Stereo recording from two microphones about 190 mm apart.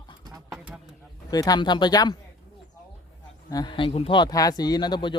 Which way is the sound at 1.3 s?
20° left (ahead or behind).